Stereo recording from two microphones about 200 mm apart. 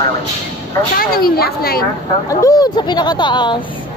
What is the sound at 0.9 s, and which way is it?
Speech, 50° left (ahead or behind).